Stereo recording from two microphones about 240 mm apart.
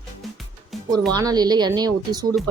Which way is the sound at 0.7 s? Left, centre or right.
Centre.